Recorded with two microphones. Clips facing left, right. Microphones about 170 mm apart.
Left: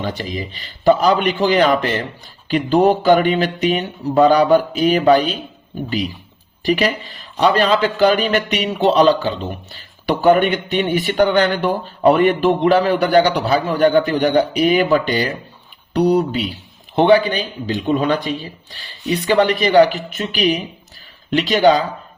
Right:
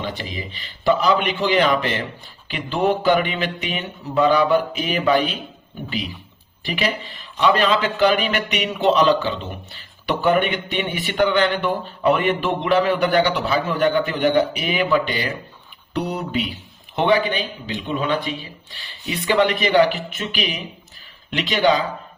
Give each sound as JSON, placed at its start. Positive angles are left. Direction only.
{"t": 0.0, "sound": "speech", "side_deg": 40}
{"t": 6.7, "sound": "speech", "side_deg": 40}